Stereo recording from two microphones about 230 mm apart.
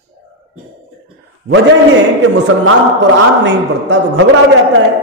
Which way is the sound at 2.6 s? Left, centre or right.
Right.